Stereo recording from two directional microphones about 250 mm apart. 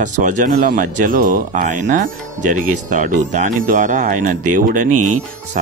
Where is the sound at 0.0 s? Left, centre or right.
Right.